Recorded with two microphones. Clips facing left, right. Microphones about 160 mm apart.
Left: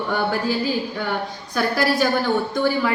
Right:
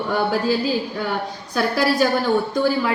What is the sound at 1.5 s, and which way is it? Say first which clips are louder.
Speech: right 1 dB; 5° right (ahead or behind).